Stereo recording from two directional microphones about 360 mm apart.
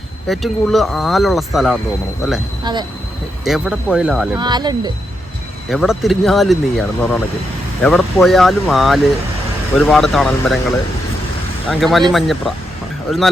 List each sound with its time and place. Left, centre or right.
0.3 s speech: centre
3.4 s speech: centre
4.4 s speech: centre
5.6 s speech: centre
11.7 s speech: centre